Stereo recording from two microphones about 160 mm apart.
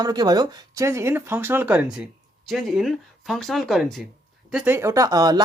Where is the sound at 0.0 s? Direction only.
25° right (ahead or behind).